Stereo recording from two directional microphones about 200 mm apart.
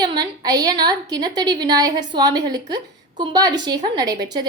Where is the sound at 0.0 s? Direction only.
20° right (ahead or behind).